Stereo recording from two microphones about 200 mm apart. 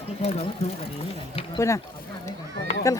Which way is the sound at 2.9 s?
15° left (ahead or behind).